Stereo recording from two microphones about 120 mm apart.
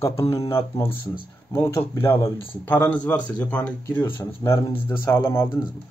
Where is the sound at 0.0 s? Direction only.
20° left (ahead or behind).